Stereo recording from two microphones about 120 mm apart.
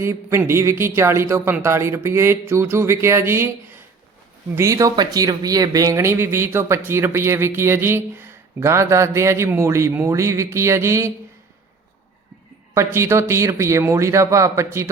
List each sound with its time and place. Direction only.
0.0 s speech: 20° right (ahead or behind)
12.7 s speech: 20° right (ahead or behind)